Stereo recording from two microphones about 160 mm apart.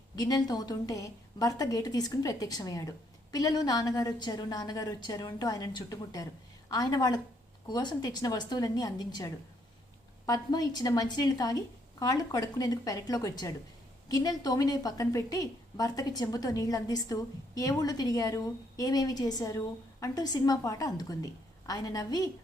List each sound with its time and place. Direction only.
0.2 s a woman's voice: 25° left (ahead or behind)